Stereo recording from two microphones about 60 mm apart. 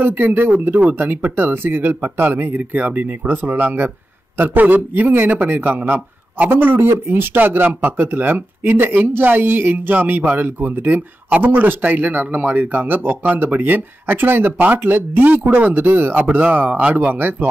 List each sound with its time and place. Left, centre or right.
0.0 s speech: right
16.3 s speech: right